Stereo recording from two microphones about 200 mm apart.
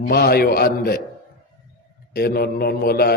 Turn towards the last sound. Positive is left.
turn(degrees=50)  # may be behind; listen again after turning